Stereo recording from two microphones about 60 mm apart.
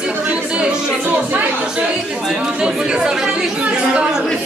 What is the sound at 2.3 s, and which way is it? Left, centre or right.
A man's voice, centre.